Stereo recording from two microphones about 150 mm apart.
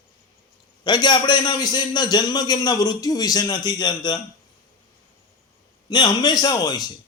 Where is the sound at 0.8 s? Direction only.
30° left (ahead or behind).